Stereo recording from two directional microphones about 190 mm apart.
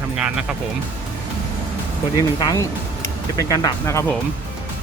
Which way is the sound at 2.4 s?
20° left (ahead or behind).